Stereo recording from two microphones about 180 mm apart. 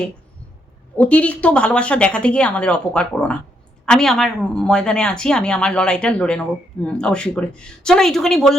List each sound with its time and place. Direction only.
0.9 s a woman's voice: 5° left (ahead or behind)